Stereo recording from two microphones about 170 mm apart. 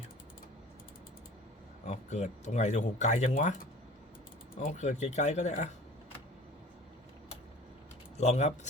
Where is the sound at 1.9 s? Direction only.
45° left (ahead or behind).